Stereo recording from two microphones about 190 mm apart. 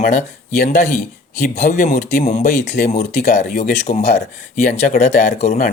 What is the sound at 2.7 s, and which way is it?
Speech, 50° left (ahead or behind).